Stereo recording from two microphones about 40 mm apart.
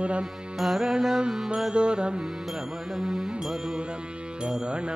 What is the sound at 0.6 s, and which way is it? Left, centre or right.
Music, centre.